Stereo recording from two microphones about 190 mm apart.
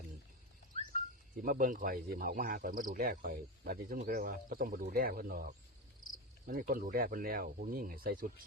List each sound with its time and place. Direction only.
1.4 s speech: 45° right (ahead or behind)